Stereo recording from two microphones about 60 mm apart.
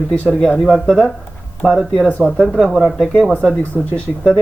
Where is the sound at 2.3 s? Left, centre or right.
Centre.